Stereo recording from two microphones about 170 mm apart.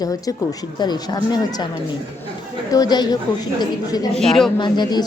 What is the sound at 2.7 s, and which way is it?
A woman's voice, 25° left (ahead or behind).